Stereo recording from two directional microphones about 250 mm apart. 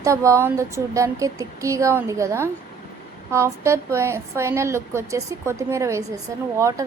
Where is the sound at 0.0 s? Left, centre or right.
Centre.